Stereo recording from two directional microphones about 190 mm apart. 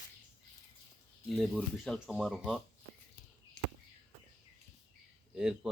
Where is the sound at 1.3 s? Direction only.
Centre (ahead or behind).